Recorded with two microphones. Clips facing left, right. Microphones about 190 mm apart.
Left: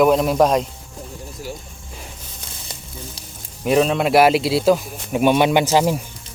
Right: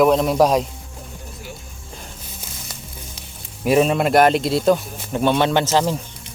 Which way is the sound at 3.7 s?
5° right (ahead or behind).